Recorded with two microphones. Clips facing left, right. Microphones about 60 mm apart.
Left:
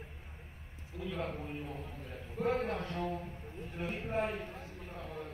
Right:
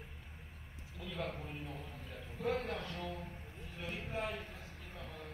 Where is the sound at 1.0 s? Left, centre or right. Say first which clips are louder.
Left 3 dB; left.